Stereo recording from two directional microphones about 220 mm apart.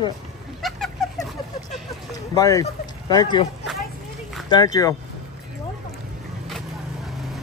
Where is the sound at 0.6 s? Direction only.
Centre (ahead or behind).